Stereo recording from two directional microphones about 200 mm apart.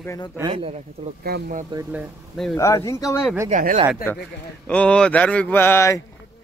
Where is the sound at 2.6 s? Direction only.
15° left (ahead or behind).